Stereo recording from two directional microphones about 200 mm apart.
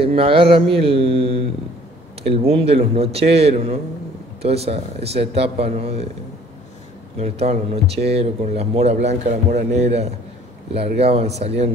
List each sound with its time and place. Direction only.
0.0 s a man's voice: 30° right (ahead or behind)
7.2 s speech: 30° right (ahead or behind)